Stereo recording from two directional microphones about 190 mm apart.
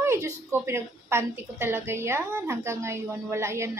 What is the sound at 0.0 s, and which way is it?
A woman's voice, 15° right (ahead or behind).